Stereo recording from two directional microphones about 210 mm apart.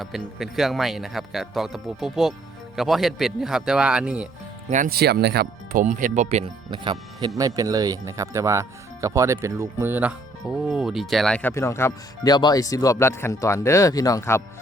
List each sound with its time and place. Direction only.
0.0 s speech: centre (ahead or behind)
4.7 s speech: 40° right (ahead or behind); by 14.4 s 15° left (ahead or behind)